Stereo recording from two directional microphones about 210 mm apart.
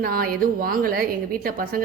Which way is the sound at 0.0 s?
45° right (ahead or behind).